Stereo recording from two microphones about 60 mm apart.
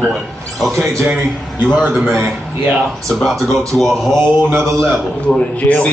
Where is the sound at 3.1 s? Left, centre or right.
Centre.